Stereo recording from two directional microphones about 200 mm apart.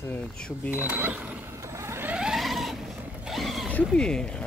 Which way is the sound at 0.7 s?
10° right (ahead or behind).